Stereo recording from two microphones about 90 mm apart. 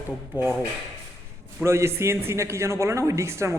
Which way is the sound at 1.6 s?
30° right (ahead or behind).